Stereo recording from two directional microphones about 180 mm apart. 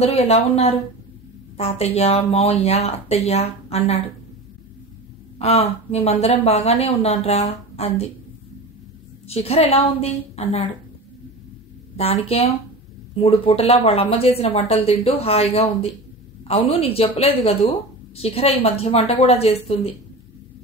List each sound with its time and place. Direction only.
0.0 s a woman's voice: 35° left (ahead or behind)
5.4 s a woman's voice: 35° left (ahead or behind)
9.3 s a woman's voice: 35° left (ahead or behind)
12.0 s a woman's voice: 35° left (ahead or behind)
13.5 s a woman's voice: 35° left (ahead or behind)